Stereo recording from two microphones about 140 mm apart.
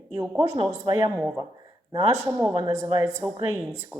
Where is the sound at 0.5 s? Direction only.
50° right (ahead or behind).